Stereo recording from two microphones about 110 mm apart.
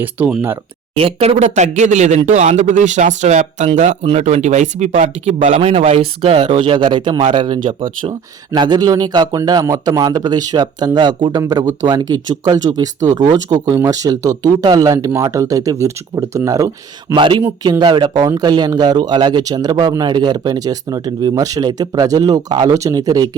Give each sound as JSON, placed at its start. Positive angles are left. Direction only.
{"t": 0.2, "sound": "speech", "side_deg": -15}
{"t": 0.9, "sound": "a man's voice", "side_deg": -60}
{"t": 4.0, "sound": "a man's voice", "side_deg": -80}
{"t": 6.6, "sound": "speech", "side_deg": -50}
{"t": 17.2, "sound": "speech", "side_deg": -50}